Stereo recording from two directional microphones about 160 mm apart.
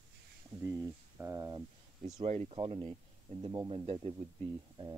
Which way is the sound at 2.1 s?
45° right (ahead or behind).